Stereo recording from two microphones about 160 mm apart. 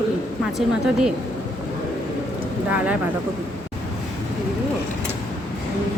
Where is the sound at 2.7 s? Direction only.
10° right (ahead or behind).